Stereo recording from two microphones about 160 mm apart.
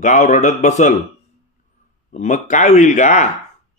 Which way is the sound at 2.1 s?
45° left (ahead or behind).